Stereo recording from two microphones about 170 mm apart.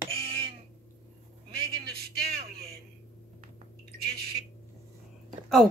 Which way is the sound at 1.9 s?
65° right (ahead or behind).